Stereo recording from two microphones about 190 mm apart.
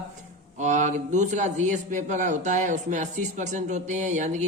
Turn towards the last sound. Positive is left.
turn(degrees=-40)  # may be behind; listen again after turning